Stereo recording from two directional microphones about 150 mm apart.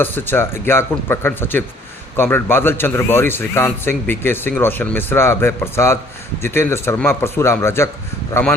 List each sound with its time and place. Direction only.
0.0 s a man's voice: 15° left (ahead or behind)